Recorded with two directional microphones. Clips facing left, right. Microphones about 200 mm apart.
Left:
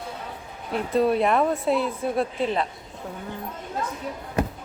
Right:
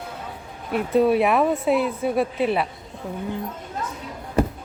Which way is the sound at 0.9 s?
5° right (ahead or behind).